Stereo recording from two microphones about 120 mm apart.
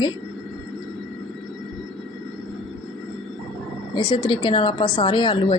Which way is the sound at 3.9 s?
35° left (ahead or behind).